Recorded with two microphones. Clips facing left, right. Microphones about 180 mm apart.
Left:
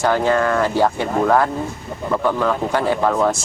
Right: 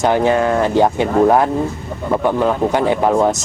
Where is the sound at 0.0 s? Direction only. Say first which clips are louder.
Right 3 dB; 20° right (ahead or behind).